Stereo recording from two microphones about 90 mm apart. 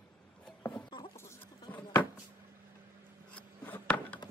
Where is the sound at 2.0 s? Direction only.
20° left (ahead or behind).